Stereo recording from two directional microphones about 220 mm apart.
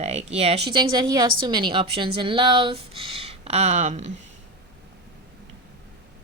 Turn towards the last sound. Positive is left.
turn(degrees=-30)  # may be behind; listen again after turning